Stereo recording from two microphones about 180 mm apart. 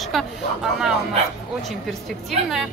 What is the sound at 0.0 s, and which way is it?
Speech, centre (ahead or behind).